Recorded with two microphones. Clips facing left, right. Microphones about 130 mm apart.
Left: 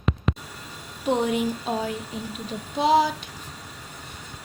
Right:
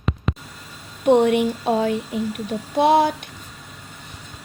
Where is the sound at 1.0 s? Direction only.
65° right (ahead or behind).